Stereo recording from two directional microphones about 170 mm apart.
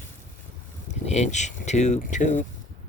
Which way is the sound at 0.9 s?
40° left (ahead or behind).